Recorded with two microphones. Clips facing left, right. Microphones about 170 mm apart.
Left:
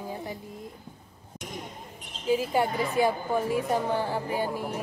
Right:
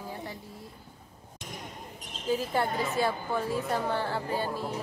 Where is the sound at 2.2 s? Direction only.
10° left (ahead or behind).